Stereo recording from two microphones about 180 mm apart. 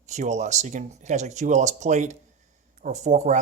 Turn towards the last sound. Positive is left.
turn(degrees=-40)  # may be behind; listen again after turning